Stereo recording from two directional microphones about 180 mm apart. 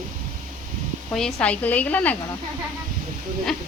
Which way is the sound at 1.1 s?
5° left (ahead or behind).